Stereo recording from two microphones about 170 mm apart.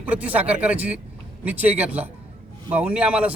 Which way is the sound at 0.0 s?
10° right (ahead or behind).